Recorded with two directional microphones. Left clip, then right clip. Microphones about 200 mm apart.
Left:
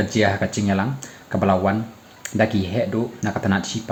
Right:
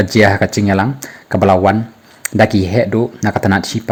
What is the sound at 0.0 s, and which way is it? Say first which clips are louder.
Speech: right 9 dB; 45° right (ahead or behind).